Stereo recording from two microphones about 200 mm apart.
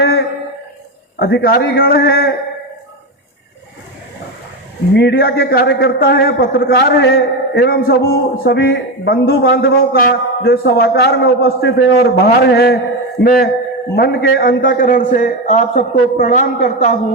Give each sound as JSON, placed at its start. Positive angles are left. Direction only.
{"t": 0.0, "sound": "a sound", "side_deg": 55}
{"t": 1.2, "sound": "a man's voice", "side_deg": 50}
{"t": 4.9, "sound": "a man's voice", "side_deg": 55}